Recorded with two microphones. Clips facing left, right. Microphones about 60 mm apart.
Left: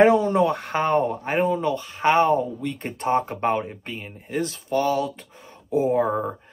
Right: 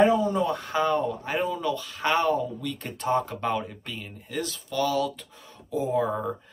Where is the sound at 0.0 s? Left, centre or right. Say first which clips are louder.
Left 5 dB; left.